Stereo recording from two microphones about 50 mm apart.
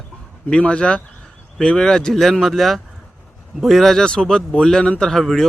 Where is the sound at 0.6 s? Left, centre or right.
Left; by 4.0 s centre.